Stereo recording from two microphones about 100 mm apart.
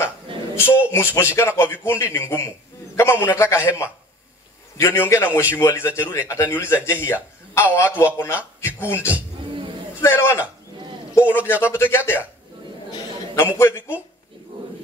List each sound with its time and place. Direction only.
0.6 s a sound: 25° left (ahead or behind)
1.1 s speech: 25° left (ahead or behind)
13.4 s speech: 25° left (ahead or behind)